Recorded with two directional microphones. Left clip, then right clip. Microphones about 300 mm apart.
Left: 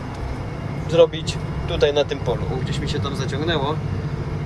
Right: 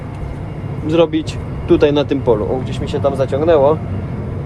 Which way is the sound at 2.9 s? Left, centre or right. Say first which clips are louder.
Right 15 dB; centre.